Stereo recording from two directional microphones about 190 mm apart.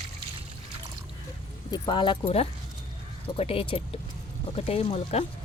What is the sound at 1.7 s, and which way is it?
A woman's voice, 20° left (ahead or behind).